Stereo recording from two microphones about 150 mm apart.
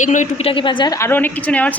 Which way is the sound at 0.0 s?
55° left (ahead or behind).